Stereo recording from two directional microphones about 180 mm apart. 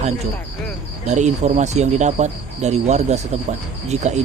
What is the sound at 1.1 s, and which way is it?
Speech, 40° right (ahead or behind).